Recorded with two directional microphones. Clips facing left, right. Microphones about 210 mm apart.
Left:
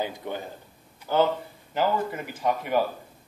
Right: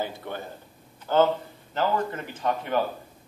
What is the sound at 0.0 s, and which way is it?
A man's voice, 15° left (ahead or behind).